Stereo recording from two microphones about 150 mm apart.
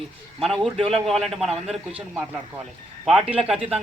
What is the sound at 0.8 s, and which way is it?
Speech, 35° right (ahead or behind).